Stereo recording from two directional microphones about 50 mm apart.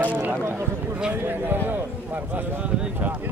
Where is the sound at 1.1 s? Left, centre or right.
Right.